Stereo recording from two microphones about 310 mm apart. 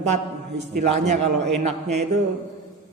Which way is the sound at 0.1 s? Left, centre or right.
Right.